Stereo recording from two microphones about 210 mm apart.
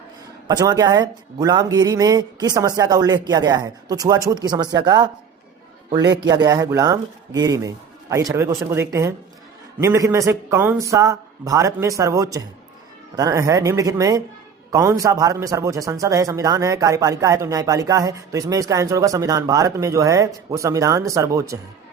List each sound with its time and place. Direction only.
0.4 s speech: 20° right (ahead or behind)
6.2 s speech: 20° right (ahead or behind)